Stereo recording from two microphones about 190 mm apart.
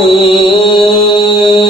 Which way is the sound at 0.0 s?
25° left (ahead or behind).